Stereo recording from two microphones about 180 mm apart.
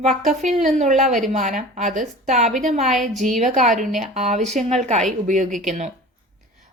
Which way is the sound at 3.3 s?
40° right (ahead or behind).